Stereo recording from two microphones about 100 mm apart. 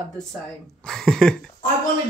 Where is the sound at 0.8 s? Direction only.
5° left (ahead or behind).